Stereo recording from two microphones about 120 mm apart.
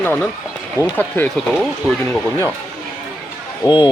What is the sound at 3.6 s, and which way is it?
Speech, 40° left (ahead or behind).